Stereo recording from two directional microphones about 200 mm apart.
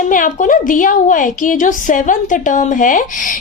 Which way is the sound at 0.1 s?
40° left (ahead or behind).